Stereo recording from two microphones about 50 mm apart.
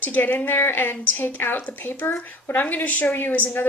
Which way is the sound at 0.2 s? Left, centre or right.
Left.